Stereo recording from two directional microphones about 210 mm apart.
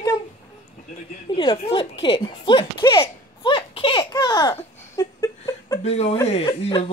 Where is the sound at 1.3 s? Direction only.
25° left (ahead or behind).